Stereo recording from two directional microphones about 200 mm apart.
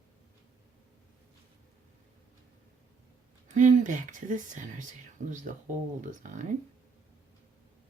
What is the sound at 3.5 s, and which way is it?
A woman's voice, 40° right (ahead or behind).